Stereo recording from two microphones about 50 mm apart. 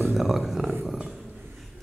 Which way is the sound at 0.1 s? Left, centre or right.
Centre.